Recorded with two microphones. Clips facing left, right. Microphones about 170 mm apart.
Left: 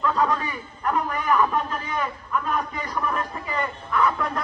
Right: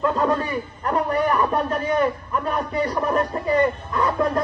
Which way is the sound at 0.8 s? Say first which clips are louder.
Right 3 dB; 35° right (ahead or behind).